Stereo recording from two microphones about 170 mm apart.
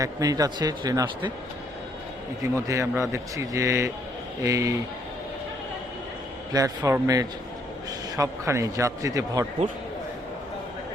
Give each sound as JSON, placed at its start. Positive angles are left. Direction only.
{"t": 0.0, "sound": "a man's voice", "side_deg": -20}
{"t": 2.6, "sound": "a man's voice", "side_deg": -15}
{"t": 6.5, "sound": "a man's voice", "side_deg": -20}